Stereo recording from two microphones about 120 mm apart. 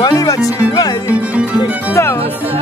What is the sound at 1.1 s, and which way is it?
Speech, 10° right (ahead or behind).